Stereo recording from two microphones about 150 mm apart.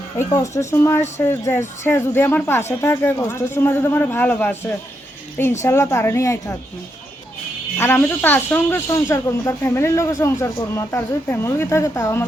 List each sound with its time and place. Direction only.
0.2 s speech: 20° left (ahead or behind)
7.8 s speech: 15° left (ahead or behind)